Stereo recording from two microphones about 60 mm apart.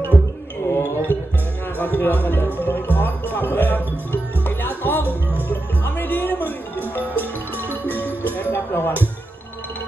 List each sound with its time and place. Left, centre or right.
0.7 s a sound: left
1.8 s speech: left
2.6 s music: left